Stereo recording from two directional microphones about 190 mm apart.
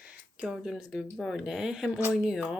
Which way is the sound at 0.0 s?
5° right (ahead or behind).